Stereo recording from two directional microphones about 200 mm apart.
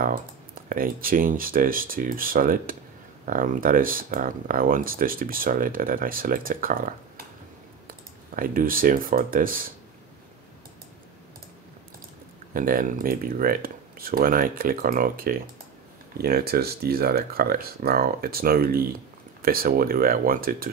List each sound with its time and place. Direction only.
0.7 s speech: 45° right (ahead or behind)
8.4 s speech: 45° right (ahead or behind)
12.5 s speech: 45° right (ahead or behind)